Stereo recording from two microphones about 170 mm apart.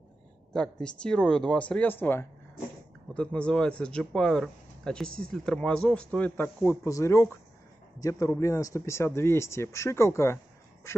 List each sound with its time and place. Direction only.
0.5 s a man's voice: 5° left (ahead or behind)